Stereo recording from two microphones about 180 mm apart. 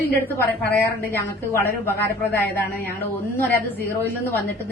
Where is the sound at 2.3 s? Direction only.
10° left (ahead or behind).